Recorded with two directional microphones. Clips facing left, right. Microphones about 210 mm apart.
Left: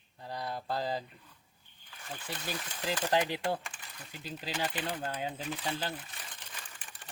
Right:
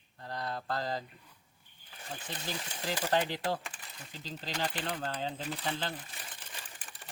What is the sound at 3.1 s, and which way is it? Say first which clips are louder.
Speech: left 1 dB; 10° left (ahead or behind).